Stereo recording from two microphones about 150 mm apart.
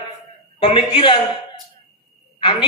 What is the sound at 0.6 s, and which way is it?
Speech, 35° left (ahead or behind).